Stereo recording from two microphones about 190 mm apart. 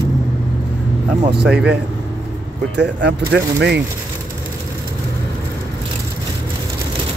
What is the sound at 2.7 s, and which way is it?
Speech, 65° right (ahead or behind).